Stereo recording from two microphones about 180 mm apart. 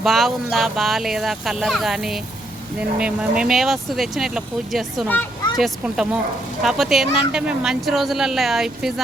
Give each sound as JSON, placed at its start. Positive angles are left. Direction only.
{"t": 0.0, "sound": "speech", "side_deg": 0}